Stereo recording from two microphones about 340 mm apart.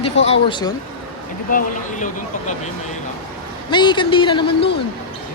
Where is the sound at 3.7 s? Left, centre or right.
Centre.